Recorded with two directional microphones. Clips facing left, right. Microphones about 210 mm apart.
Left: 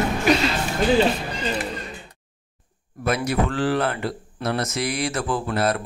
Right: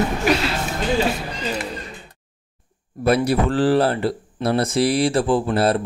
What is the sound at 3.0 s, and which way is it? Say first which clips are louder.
Speech: right 5 dB; 35° right (ahead or behind).